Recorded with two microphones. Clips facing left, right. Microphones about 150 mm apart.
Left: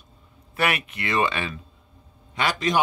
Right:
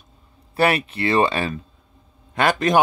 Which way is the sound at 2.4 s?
50° right (ahead or behind).